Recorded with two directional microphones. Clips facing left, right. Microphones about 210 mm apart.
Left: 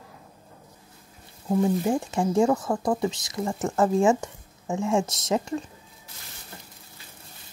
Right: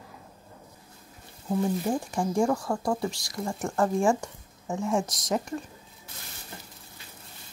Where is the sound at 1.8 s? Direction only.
20° left (ahead or behind).